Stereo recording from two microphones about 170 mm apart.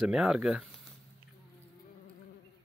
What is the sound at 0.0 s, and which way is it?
Speech, 5° right (ahead or behind).